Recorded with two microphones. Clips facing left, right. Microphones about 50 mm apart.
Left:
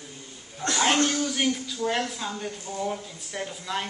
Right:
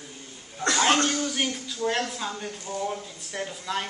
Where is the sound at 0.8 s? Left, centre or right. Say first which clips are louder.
Even; centre.